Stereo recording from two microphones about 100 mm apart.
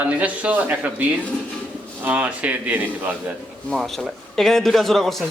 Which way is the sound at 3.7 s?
Centre (ahead or behind).